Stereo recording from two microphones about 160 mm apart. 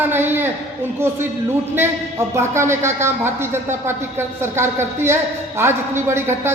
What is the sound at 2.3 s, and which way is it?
A man's voice, 15° right (ahead or behind).